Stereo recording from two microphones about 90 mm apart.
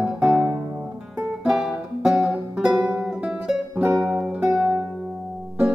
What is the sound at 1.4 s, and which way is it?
Music, 5° right (ahead or behind).